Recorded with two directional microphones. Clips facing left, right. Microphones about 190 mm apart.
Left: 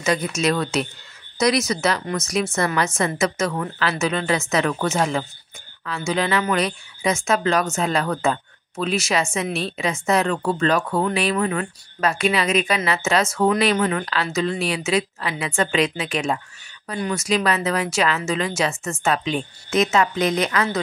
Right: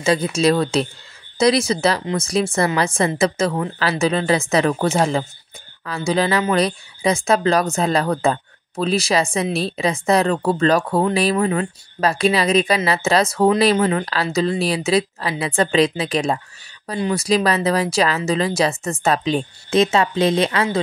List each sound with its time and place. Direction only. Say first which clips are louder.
0.0 s speech: right 4 dB; 30° right (ahead or behind)